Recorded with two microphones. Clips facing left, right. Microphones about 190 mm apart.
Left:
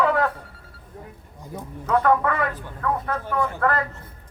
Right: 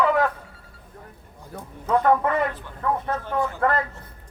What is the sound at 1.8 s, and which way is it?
Speech, 20° right (ahead or behind).